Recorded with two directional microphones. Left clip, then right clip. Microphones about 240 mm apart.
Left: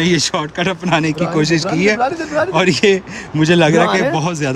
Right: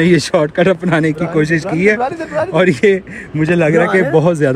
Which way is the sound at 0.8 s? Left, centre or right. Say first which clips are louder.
Right 1 dB; centre.